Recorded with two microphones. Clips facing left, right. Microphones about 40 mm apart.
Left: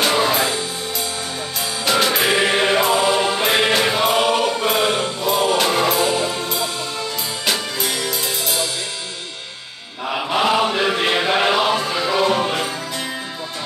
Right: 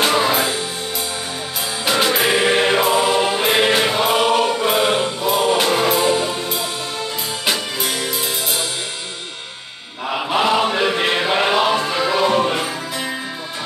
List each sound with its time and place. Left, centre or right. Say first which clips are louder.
0.0 s music: right 1 dB; centre
1.9 s music: even; centre
10.0 s chant: right 1 dB; centre